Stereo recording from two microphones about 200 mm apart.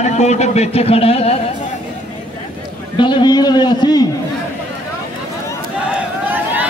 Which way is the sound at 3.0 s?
20° left (ahead or behind).